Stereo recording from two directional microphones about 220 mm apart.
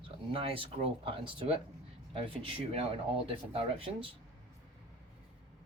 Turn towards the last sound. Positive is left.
turn(degrees=-25)  # may be behind; listen again after turning